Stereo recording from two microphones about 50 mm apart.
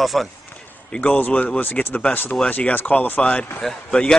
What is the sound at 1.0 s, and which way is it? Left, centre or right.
Speech, left.